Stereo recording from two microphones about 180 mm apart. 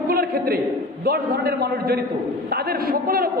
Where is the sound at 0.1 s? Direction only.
55° right (ahead or behind).